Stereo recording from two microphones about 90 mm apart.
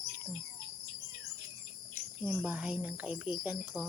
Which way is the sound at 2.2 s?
15° right (ahead or behind).